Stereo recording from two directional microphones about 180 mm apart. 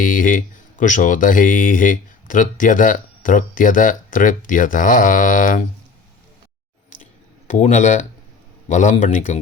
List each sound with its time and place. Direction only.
0.0 s speech: 45° left (ahead or behind)
7.0 s a sound: 45° left (ahead or behind)
8.7 s speech: 45° left (ahead or behind)